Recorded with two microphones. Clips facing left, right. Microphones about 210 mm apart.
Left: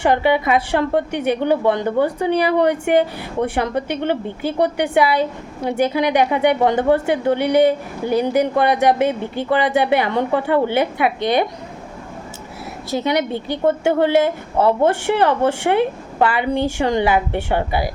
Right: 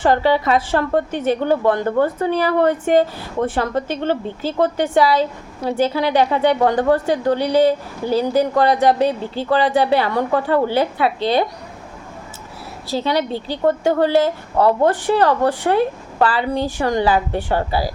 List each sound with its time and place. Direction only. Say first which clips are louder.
0.0 s a woman's voice: even; 15° left (ahead or behind)
13.0 s a woman's voice: even; 20° left (ahead or behind)